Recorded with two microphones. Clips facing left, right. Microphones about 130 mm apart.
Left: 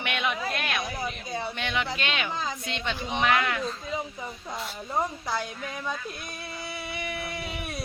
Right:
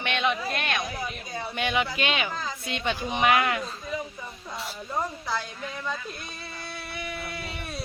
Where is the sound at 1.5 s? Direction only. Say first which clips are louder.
Right 8 dB; 10° right (ahead or behind).